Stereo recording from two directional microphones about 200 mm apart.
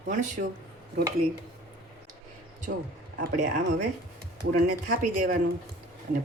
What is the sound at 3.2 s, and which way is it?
Speech, 40° right (ahead or behind).